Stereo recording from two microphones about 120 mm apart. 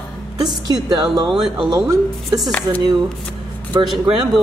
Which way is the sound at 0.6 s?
35° right (ahead or behind).